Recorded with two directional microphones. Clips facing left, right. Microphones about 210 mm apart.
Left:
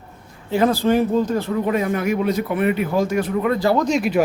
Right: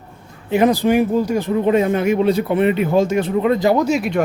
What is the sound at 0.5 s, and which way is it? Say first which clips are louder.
Speech: right 2 dB; 15° right (ahead or behind).